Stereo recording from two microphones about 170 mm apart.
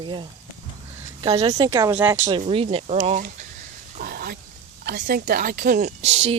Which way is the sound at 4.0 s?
60° right (ahead or behind).